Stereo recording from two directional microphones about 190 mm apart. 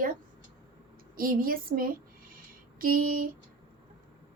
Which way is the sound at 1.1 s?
50° right (ahead or behind).